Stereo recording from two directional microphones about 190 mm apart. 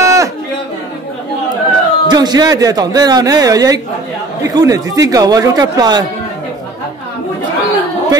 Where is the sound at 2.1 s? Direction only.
20° right (ahead or behind).